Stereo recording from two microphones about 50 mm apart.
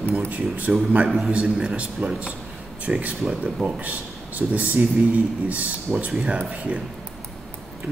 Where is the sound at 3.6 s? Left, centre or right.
Right.